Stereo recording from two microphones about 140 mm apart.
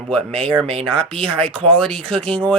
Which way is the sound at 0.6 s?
40° right (ahead or behind).